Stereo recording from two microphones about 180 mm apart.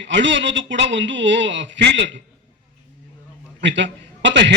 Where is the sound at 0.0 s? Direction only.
90° right.